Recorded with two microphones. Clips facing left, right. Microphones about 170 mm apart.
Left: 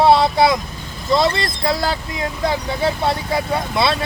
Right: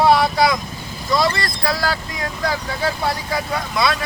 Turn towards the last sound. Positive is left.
turn(degrees=30)  # may be behind; listen again after turning